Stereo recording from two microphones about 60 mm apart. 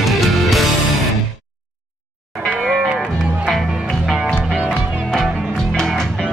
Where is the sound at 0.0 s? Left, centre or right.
Centre.